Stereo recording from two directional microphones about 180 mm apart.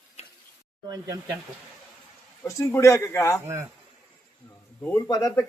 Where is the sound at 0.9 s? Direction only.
20° right (ahead or behind).